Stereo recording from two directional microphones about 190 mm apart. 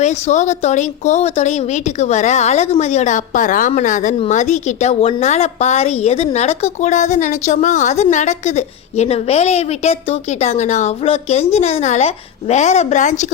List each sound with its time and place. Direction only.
0.0 s a woman's voice: 35° left (ahead or behind)